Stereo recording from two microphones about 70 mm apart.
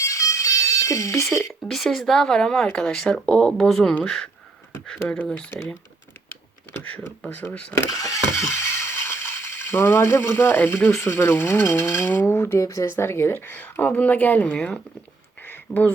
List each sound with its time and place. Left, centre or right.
0.0 s music: left
1.6 s speech: centre
4.9 s speech: centre
7.5 s speech: centre
7.8 s a sound: left
11.0 s speech: left
12.6 s speech: left
13.0 s speech: left; by 14.8 s centre
15.7 s speech: left